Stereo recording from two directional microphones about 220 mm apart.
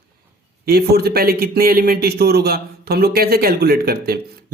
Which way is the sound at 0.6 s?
45° right (ahead or behind).